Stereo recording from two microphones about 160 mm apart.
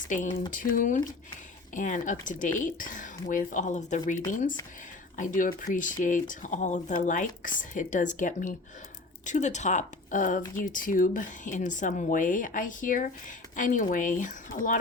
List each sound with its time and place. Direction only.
0.5 s speech: 55° left (ahead or behind)